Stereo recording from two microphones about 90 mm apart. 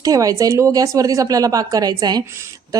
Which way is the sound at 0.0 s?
40° right (ahead or behind).